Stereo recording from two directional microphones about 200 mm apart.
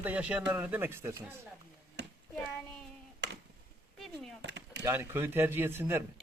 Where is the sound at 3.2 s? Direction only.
60° right (ahead or behind).